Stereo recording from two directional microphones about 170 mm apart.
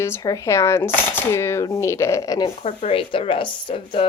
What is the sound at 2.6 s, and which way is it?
Speech, 35° left (ahead or behind).